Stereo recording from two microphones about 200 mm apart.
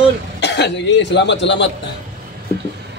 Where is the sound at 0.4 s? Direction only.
60° left (ahead or behind).